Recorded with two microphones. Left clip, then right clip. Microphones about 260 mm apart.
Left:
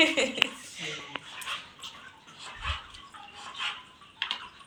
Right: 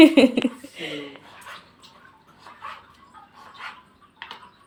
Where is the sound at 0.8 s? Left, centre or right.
Right.